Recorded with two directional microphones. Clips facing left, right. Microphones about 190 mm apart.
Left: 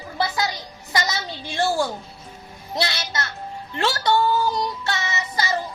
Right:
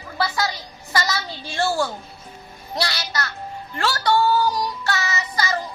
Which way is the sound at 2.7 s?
20° left (ahead or behind).